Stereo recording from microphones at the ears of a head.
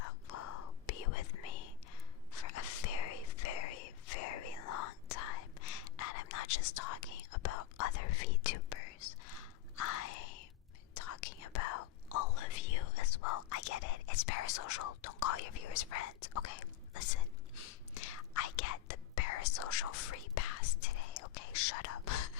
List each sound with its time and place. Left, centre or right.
0.0 s whispering: left